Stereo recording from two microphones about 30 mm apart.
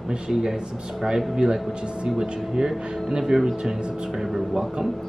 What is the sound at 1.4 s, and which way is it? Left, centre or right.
A man's voice, right.